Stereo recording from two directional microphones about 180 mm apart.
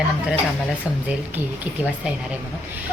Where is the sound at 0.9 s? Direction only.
5° right (ahead or behind).